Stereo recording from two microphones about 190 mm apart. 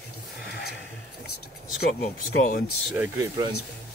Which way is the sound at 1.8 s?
50° left (ahead or behind).